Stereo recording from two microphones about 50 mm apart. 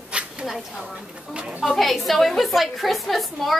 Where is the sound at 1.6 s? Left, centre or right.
Centre.